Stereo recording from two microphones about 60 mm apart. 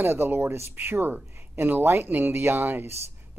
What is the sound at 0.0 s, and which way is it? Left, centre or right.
Speech, right.